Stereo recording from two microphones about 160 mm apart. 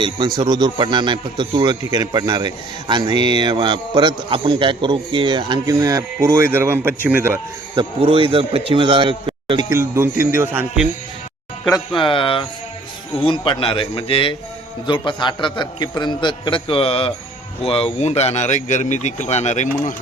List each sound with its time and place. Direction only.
0.3 s a man's voice: 25° right (ahead or behind)
7.8 s a man's voice: 35° right (ahead or behind)
9.6 s speech: 15° right (ahead or behind)
11.9 s a man's voice: 35° left (ahead or behind); by 20.0 s 50° left (ahead or behind)